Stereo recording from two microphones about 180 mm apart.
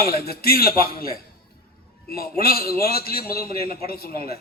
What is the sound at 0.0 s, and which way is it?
A man's voice, 60° left (ahead or behind).